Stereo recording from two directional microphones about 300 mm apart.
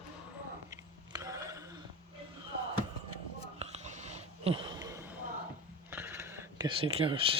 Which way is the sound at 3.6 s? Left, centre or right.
Right.